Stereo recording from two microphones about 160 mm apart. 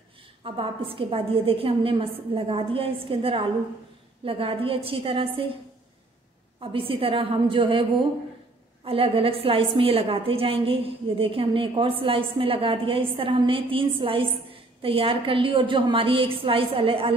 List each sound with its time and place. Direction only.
0.4 s a woman's voice: 35° right (ahead or behind)
6.6 s a woman's voice: 35° right (ahead or behind)
8.8 s a woman's voice: 35° right (ahead or behind)